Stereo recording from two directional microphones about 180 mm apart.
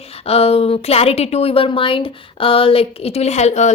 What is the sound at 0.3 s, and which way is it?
Speech, 35° left (ahead or behind).